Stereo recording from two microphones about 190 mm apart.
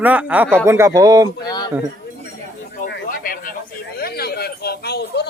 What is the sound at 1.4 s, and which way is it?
Speech, 20° left (ahead or behind).